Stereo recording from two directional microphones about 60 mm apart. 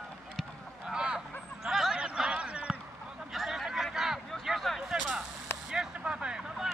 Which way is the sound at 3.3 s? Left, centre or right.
Centre.